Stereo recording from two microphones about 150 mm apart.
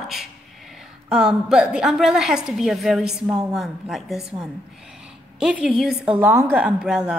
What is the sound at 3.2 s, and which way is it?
Speech, 20° right (ahead or behind).